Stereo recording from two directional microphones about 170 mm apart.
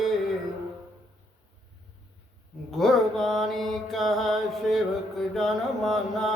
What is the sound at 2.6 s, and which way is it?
Mantra, centre (ahead or behind).